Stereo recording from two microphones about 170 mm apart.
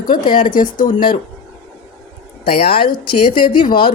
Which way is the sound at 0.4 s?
55° left (ahead or behind).